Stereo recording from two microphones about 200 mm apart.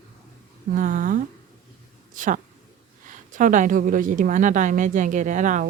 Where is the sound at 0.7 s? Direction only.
40° right (ahead or behind).